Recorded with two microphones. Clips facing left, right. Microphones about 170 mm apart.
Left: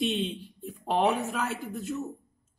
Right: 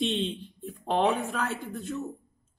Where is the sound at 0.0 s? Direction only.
10° left (ahead or behind).